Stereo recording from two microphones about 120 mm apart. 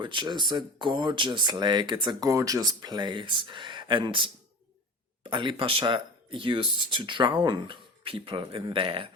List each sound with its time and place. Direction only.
0.0 s speech: 40° right (ahead or behind)